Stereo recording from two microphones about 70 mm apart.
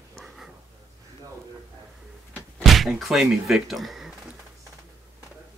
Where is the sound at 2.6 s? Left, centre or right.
Centre.